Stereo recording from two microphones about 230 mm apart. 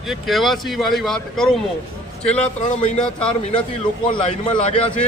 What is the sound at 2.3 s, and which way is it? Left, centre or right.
Speech, left.